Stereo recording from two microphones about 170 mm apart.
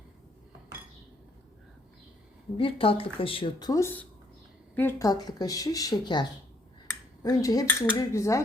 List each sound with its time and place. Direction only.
2.6 s a woman's voice: 30° left (ahead or behind)